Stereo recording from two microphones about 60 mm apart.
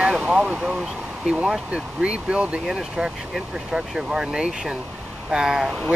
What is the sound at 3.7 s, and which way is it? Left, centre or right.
Speech, centre.